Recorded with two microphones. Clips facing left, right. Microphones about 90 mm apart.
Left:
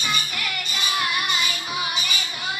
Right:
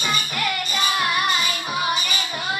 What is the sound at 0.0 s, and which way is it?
Music, 40° right (ahead or behind).